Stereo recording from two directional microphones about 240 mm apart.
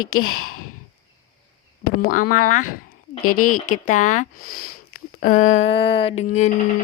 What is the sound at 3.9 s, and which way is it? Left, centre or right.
Speech, left.